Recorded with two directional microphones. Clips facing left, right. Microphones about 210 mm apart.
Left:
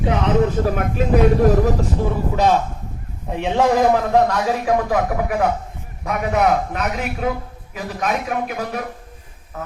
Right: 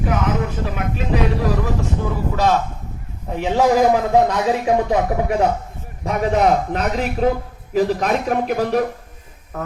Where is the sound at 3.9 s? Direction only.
20° right (ahead or behind).